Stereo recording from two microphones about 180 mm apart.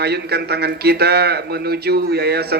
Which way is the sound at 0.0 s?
65° right (ahead or behind).